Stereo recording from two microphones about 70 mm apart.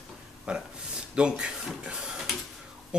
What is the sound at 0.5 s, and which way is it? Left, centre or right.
Speech, centre.